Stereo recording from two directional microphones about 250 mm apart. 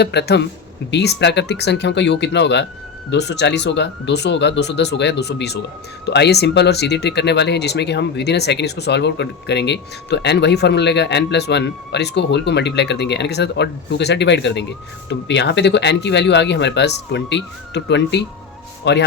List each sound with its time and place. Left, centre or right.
0.0 s speech: left